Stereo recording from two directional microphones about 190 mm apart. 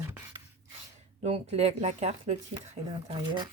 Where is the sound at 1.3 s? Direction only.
35° right (ahead or behind).